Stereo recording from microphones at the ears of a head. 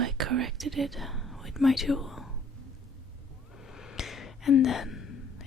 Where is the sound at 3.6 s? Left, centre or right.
Left.